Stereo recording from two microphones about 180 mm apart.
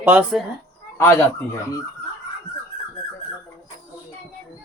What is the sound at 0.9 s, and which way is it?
Speech, 15° left (ahead or behind).